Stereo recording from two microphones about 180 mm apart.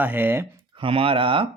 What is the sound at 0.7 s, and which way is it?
Speech, 30° right (ahead or behind).